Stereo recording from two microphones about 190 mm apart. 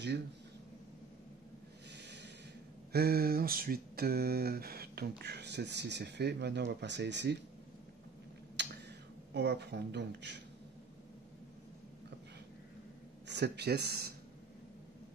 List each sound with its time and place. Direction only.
1.9 s snort: 65° right (ahead or behind)
2.9 s speech: 55° right (ahead or behind)
8.6 s a sound: 65° right (ahead or behind)
9.3 s speech: 65° right (ahead or behind)
13.3 s speech: 60° right (ahead or behind)